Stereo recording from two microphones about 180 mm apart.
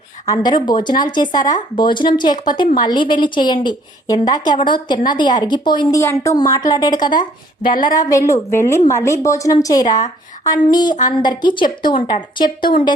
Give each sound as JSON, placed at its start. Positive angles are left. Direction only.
{"t": 0.3, "sound": "a woman's voice", "side_deg": 25}
{"t": 6.0, "sound": "a woman's voice", "side_deg": 15}